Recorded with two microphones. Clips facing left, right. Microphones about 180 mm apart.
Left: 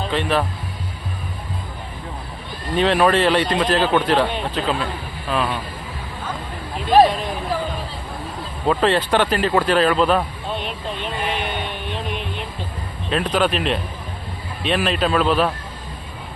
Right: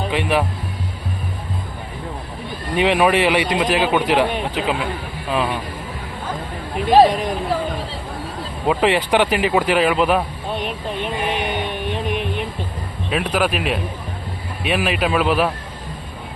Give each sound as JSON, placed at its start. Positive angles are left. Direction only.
{"t": 0.0, "sound": "speech", "side_deg": -15}
{"t": 2.7, "sound": "a man's voice", "side_deg": -15}
{"t": 7.1, "sound": "a man's voice", "side_deg": -20}
{"t": 8.6, "sound": "a man's voice", "side_deg": -15}
{"t": 11.0, "sound": "vehicle", "side_deg": -15}
{"t": 13.1, "sound": "a man's voice", "side_deg": -10}